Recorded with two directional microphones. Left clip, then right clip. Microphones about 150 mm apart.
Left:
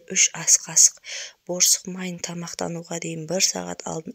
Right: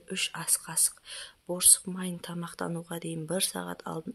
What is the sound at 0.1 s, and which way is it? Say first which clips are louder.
Speech: left 12 dB; 25° left (ahead or behind).